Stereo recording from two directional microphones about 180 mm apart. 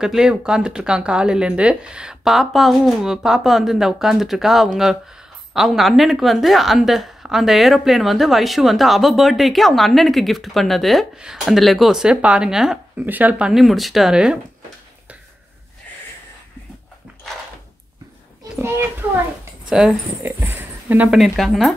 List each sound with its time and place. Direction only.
0.0 s a woman's voice: 5° right (ahead or behind)
18.4 s a child's voice: 15° right (ahead or behind)
19.7 s a woman's voice: 5° right (ahead or behind)